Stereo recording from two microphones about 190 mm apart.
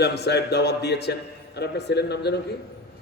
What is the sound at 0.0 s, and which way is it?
A man's voice, 60° left (ahead or behind).